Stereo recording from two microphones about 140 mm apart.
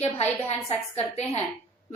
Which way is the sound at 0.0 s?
50° left (ahead or behind).